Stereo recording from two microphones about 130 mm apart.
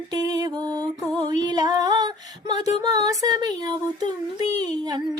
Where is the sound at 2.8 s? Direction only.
30° right (ahead or behind).